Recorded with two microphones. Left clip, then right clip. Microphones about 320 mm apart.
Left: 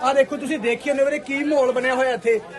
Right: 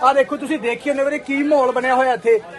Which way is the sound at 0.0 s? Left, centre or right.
Centre.